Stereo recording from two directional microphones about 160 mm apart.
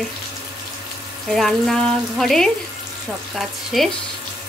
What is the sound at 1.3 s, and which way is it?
Speech, centre (ahead or behind).